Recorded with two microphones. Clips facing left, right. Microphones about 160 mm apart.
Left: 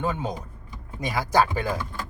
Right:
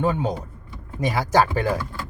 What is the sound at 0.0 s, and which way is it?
Speech, 15° right (ahead or behind).